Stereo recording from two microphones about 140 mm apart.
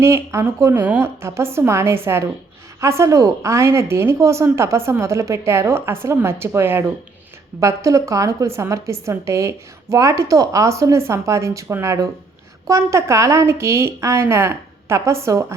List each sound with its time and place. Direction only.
0.0 s a woman's voice: 20° right (ahead or behind)